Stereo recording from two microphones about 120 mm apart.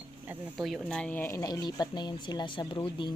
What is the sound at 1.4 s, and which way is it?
Speech, 35° left (ahead or behind).